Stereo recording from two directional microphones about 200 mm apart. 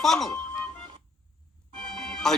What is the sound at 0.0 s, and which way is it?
Speech, centre (ahead or behind).